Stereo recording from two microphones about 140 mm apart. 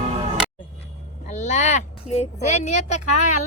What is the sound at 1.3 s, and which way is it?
Speech, 60° left (ahead or behind).